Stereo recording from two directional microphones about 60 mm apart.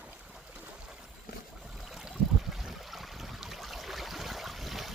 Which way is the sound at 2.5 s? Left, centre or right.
Centre.